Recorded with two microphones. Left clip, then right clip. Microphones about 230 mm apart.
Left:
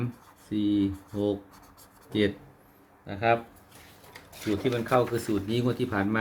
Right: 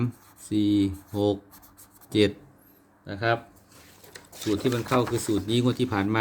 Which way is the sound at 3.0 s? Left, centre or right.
Right.